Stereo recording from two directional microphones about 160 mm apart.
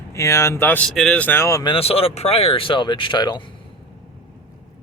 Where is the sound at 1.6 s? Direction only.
35° left (ahead or behind).